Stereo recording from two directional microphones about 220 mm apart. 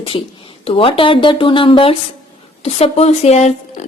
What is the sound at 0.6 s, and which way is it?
A woman's voice, 25° left (ahead or behind).